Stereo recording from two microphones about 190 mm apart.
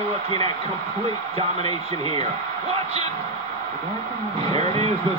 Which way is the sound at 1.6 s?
30° right (ahead or behind).